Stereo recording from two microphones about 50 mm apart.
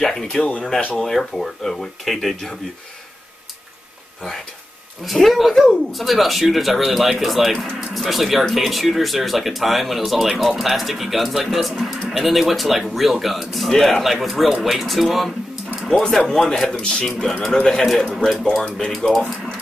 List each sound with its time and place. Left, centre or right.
0.0 s speech: centre
0.4 s speech: left
0.9 s speech: centre
5.0 s speech: centre
16.0 s speech: centre